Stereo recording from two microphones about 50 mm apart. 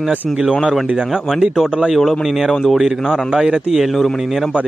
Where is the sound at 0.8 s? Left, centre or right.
Centre.